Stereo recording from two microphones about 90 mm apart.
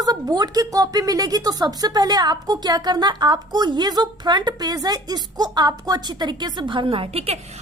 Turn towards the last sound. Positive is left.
turn(degrees=-85)